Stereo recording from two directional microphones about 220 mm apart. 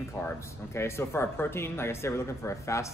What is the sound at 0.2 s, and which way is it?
Speech, 10° left (ahead or behind).